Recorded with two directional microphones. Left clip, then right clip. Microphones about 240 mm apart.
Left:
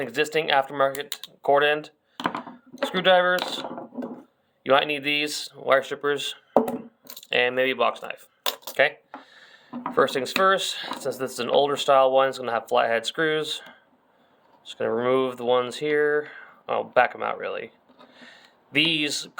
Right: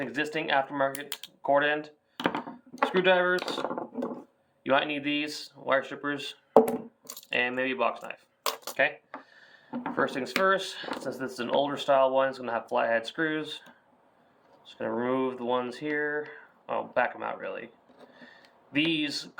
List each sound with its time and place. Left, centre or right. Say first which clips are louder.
0.0 s speech: left 7 dB; left
2.9 s speech: left 5 dB; left
4.6 s speech: left 5 dB; left
9.3 s music: even; left
10.4 s speech: left 5 dB; left
18.2 s a sound: left 4 dB; left